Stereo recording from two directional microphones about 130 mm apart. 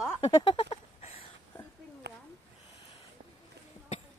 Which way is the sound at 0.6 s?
50° left (ahead or behind).